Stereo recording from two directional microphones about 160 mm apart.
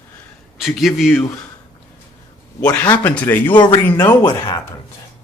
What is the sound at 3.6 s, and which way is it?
Speech, 30° left (ahead or behind).